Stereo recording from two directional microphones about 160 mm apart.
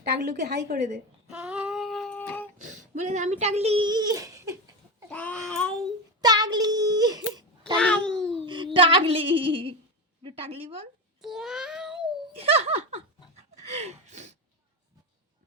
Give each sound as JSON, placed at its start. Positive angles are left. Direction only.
{"t": 0.0, "sound": "a woman's voice", "side_deg": -90}
{"t": 1.3, "sound": "child singing", "side_deg": -5}
{"t": 3.0, "sound": "a child's voice", "side_deg": -45}
{"t": 5.0, "sound": "a child's voice", "side_deg": 10}
{"t": 6.2, "sound": "a sound", "side_deg": -25}
{"t": 7.8, "sound": "babbling", "side_deg": 5}
{"t": 8.4, "sound": "female singing", "side_deg": -30}
{"t": 10.2, "sound": "a child's voice", "side_deg": -35}
{"t": 11.2, "sound": "a sound", "side_deg": 0}
{"t": 12.0, "sound": "giggle", "side_deg": -40}
{"t": 13.3, "sound": "gasp", "side_deg": -45}